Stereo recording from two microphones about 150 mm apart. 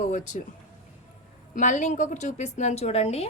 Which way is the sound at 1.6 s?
60° left (ahead or behind).